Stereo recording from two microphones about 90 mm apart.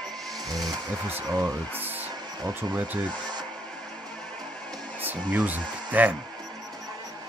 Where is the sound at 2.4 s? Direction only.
50° right (ahead or behind).